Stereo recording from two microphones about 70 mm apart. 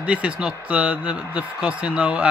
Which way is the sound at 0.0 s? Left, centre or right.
Centre.